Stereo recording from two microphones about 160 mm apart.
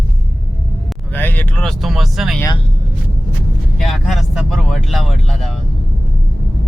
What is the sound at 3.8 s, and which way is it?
Speech, centre (ahead or behind).